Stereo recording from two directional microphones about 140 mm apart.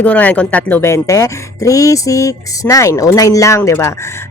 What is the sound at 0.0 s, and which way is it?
A woman's voice, 10° left (ahead or behind).